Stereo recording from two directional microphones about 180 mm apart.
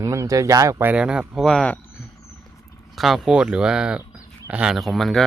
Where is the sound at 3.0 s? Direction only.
Centre (ahead or behind).